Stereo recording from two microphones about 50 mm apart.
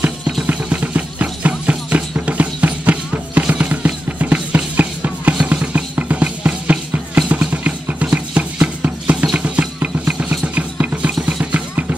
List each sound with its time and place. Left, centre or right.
0.5 s music: right
9.1 s music: centre